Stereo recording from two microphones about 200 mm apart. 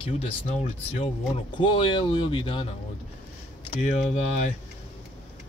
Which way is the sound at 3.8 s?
35° left (ahead or behind).